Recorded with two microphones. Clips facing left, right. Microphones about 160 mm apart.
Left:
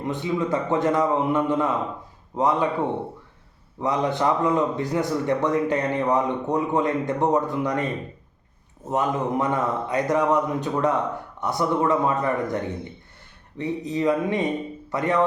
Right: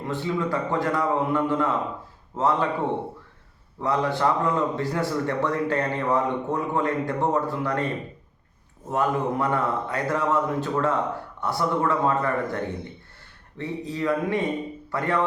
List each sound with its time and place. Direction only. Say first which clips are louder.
0.0 s a man's voice: left 2 dB; 20° left (ahead or behind)
3.8 s a man's voice: left 1 dB; 20° left (ahead or behind)
8.9 s a man's voice: left 1 dB; 20° left (ahead or behind)